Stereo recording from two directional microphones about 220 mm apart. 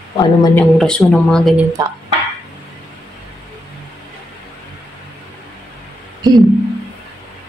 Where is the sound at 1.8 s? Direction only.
15° right (ahead or behind).